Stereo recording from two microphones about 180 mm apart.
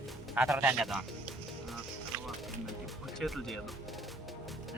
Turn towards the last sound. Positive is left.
turn(degrees=0)  # may be behind; listen again after turning